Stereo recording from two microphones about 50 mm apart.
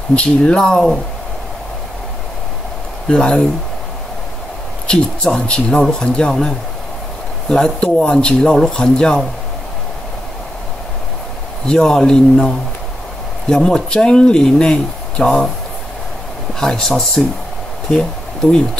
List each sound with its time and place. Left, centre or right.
0.1 s speech: left
3.1 s speech: centre
4.8 s speech: centre
7.4 s speech: centre
11.6 s speech: centre
16.5 s speech: centre